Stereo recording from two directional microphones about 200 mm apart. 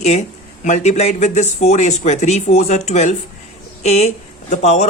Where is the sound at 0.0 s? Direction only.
35° left (ahead or behind).